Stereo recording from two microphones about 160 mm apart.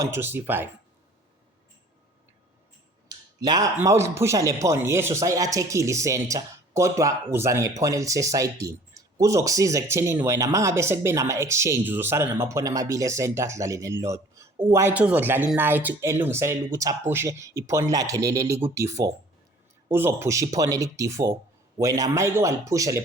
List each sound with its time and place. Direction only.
0.0 s speech: 15° right (ahead or behind)
3.1 s a sound: 25° right (ahead or behind)
3.8 s speech: 15° right (ahead or behind)